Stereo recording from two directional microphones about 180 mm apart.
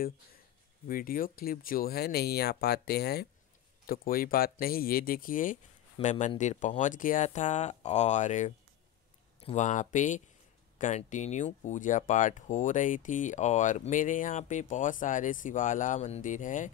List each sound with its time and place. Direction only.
0.8 s speech: 50° left (ahead or behind)